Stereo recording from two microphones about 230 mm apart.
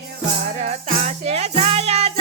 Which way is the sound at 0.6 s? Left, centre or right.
Right.